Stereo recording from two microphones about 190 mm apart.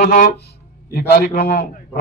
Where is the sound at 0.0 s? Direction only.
50° left (ahead or behind).